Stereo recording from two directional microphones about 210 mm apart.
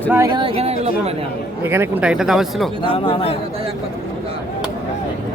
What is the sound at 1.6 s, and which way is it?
Speech, 10° right (ahead or behind).